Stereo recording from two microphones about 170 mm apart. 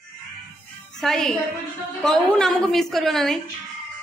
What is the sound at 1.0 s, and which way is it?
A woman's voice, centre (ahead or behind).